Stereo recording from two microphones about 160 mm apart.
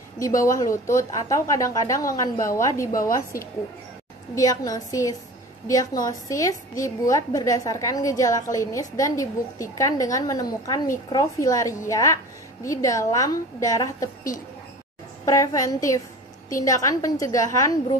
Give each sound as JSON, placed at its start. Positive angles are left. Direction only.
{"t": 0.4, "sound": "a woman's voice", "side_deg": 20}
{"t": 3.3, "sound": "a woman's voice", "side_deg": 60}
{"t": 4.4, "sound": "a woman's voice", "side_deg": 20}